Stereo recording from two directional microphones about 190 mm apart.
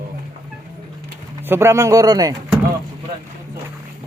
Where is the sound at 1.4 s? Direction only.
10° right (ahead or behind).